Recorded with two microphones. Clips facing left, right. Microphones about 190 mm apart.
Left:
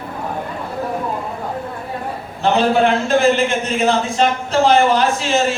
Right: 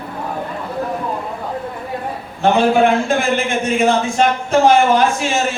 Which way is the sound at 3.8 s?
50° right (ahead or behind).